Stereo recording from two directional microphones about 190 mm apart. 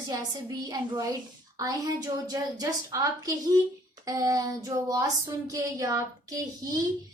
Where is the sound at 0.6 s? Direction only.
20° right (ahead or behind).